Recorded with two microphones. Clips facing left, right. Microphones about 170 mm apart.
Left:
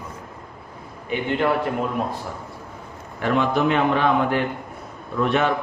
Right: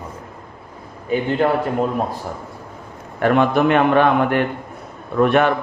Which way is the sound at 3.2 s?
55° right (ahead or behind).